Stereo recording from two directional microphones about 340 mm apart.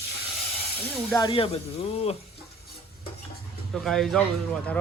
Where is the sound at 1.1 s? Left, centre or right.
Centre.